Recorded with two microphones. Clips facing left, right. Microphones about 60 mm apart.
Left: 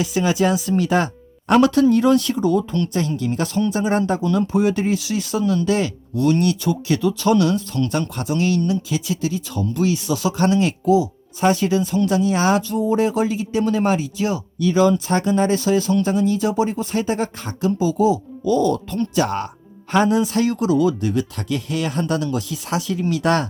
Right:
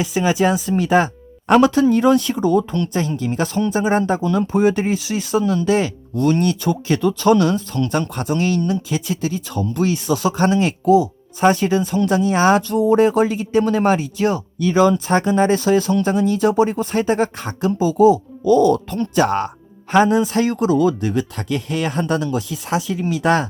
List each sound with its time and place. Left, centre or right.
0.0 s speech: right
12.6 s speech: right
13.0 s speech: right
21.5 s speech: right
21.9 s speech: right